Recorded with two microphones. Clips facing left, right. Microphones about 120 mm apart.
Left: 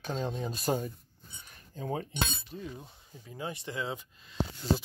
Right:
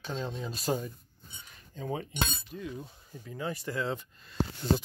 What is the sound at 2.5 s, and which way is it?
Speech, 25° left (ahead or behind).